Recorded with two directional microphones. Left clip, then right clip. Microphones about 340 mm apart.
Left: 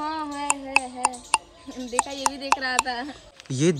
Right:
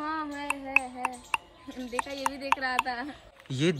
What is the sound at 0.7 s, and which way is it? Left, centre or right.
Speech, centre.